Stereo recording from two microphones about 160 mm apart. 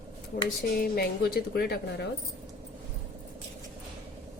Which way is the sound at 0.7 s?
75° left (ahead or behind).